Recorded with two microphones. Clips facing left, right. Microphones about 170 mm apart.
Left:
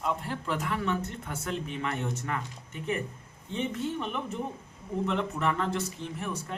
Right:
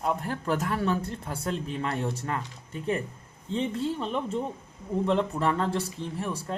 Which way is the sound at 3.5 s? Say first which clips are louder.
Right 3 dB; 30° right (ahead or behind).